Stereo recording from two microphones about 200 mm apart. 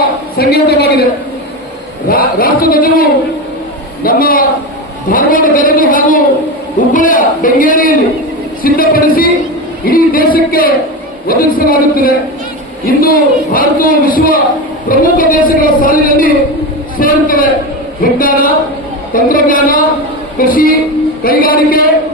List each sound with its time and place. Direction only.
0.3 s a man's voice: 50° left (ahead or behind)
2.0 s a man's voice: 45° left (ahead or behind)